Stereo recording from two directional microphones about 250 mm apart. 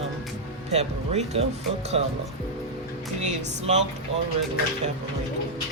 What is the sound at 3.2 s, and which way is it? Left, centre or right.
Speech, right.